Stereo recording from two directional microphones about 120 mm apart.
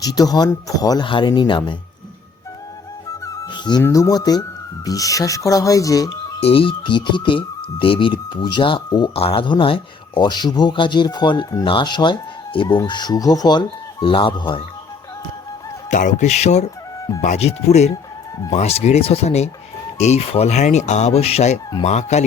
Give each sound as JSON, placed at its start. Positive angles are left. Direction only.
{"t": 0.0, "sound": "speech", "side_deg": 35}
{"t": 3.4, "sound": "music", "side_deg": 40}
{"t": 3.8, "sound": "speech", "side_deg": 25}
{"t": 6.4, "sound": "speech", "side_deg": 50}
{"t": 9.1, "sound": "speech", "side_deg": 50}
{"t": 15.9, "sound": "speech", "side_deg": 90}